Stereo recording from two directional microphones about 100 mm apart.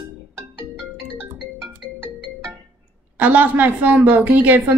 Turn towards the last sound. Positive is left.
turn(degrees=-15)  # may be behind; listen again after turning